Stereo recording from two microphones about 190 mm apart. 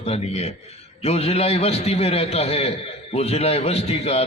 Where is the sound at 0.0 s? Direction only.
35° left (ahead or behind).